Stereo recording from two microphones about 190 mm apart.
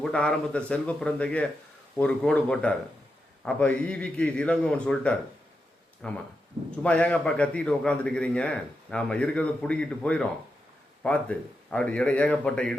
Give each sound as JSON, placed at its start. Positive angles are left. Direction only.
{"t": 0.0, "sound": "a man's voice", "side_deg": 5}